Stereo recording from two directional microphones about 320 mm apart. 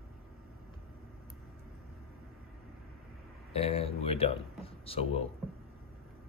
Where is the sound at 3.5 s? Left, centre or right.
Centre.